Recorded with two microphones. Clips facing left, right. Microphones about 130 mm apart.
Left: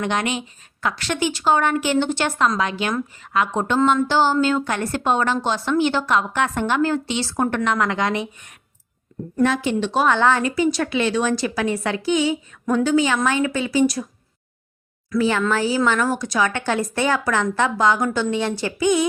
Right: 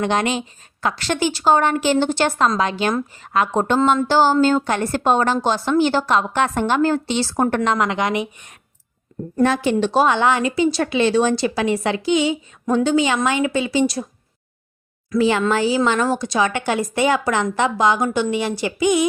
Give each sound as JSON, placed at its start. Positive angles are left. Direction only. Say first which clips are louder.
{"t": 0.0, "sound": "a woman's voice", "louder": "right 3 dB", "side_deg": -30}
{"t": 7.8, "sound": "a woman's voice", "louder": "right 1 dB", "side_deg": -15}
{"t": 10.1, "sound": "a woman's voice", "louder": "even", "side_deg": -15}
{"t": 10.5, "sound": "a woman's voice", "louder": "right 2 dB", "side_deg": -30}
{"t": 15.1, "sound": "a woman's voice", "louder": "right 2 dB", "side_deg": -20}
{"t": 16.5, "sound": "a woman's voice", "louder": "right 1 dB", "side_deg": -10}